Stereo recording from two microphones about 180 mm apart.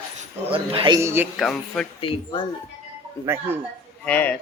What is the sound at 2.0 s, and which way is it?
Speech, 30° left (ahead or behind).